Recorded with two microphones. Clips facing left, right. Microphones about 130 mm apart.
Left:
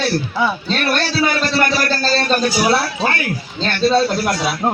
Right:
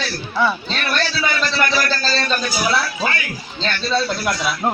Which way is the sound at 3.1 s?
45° left (ahead or behind).